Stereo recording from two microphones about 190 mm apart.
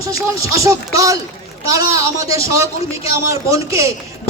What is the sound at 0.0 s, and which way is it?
A man's voice, 15° right (ahead or behind).